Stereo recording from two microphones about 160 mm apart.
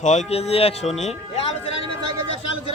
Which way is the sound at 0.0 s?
50° left (ahead or behind).